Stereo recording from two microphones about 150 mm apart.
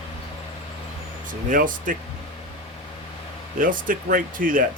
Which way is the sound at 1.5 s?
65° right (ahead or behind).